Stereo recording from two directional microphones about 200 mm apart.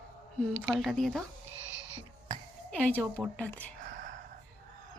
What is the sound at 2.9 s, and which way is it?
Speech, 5° left (ahead or behind).